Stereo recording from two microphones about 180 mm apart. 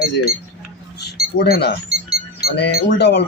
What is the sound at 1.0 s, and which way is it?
Speech, 65° left (ahead or behind).